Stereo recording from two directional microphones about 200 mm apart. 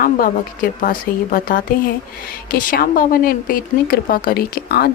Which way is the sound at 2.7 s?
45° left (ahead or behind).